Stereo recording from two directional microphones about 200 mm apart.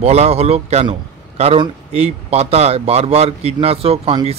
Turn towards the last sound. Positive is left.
turn(degrees=-30)  # may be behind; listen again after turning